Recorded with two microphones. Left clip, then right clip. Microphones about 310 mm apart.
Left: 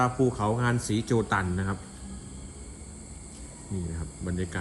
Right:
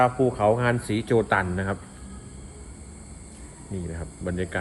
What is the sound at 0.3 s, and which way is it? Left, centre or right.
Speech, centre.